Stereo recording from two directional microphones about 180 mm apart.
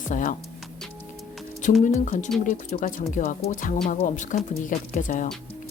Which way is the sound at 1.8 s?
45° left (ahead or behind).